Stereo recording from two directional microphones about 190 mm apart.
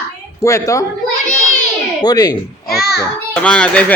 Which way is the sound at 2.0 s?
20° left (ahead or behind).